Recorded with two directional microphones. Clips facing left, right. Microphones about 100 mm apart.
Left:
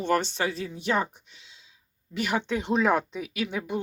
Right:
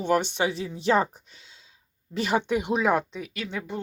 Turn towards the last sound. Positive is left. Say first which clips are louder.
# left 3 dB
turn(degrees=10)  # may be behind; listen again after turning